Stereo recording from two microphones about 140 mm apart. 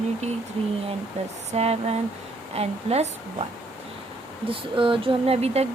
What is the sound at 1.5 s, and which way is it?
A woman's voice, 50° right (ahead or behind).